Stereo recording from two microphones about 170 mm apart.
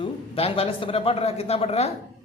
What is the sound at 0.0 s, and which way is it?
A man's voice, 35° left (ahead or behind).